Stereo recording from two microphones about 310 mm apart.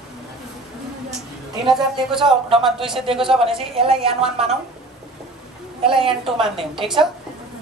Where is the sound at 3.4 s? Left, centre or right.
Centre.